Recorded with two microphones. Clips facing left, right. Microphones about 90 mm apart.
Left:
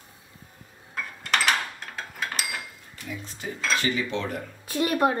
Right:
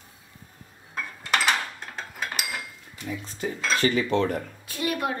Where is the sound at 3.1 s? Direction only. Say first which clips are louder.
Right 4 dB; 40° right (ahead or behind).